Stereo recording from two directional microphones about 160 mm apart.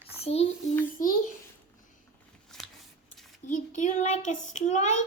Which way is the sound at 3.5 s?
50° left (ahead or behind).